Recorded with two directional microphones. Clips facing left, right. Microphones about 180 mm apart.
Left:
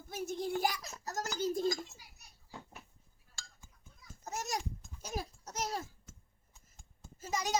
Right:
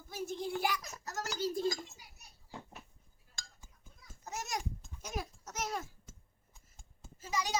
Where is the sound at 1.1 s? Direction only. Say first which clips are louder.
Left 1 dB; 45° left (ahead or behind).